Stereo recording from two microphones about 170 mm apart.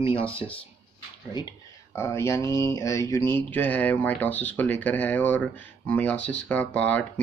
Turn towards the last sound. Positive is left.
turn(degrees=10)  # may be behind; listen again after turning